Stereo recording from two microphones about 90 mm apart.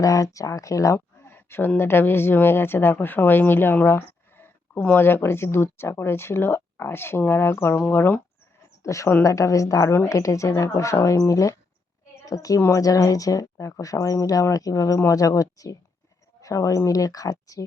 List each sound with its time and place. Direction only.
0.0 s speech: 40° left (ahead or behind); by 8.2 s 20° left (ahead or behind)
8.8 s a woman's voice: 35° left (ahead or behind)